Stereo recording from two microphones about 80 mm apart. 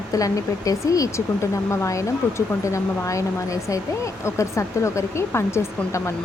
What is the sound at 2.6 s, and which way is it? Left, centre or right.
Speech, left.